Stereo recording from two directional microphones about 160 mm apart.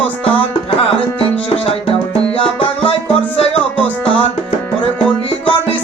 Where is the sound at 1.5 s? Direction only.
35° left (ahead or behind).